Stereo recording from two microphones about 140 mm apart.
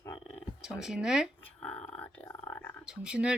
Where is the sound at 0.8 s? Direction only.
5° right (ahead or behind).